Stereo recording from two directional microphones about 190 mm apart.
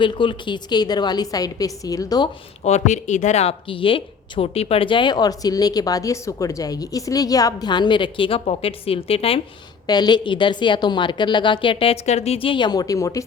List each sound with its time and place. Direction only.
0.0 s speech: 25° left (ahead or behind)
2.6 s speech: 35° left (ahead or behind); by 13.2 s 15° left (ahead or behind)